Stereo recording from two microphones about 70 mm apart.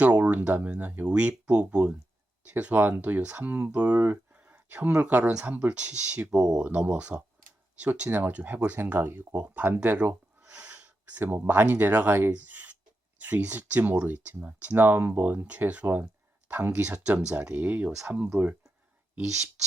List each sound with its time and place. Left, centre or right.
0.0 s speech: right
4.4 s a sound: right
4.9 s speech: right
12.3 s a sound: right
13.1 s speech: right
17.5 s speech: right